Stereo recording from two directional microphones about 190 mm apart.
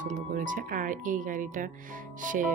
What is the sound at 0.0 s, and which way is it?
Speech, 40° right (ahead or behind).